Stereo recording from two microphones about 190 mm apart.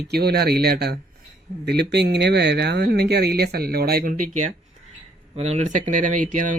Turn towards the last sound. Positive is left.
turn(degrees=-45)  # may be behind; listen again after turning